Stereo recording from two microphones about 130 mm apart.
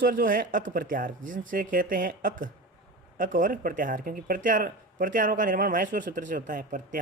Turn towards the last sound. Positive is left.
turn(degrees=-90)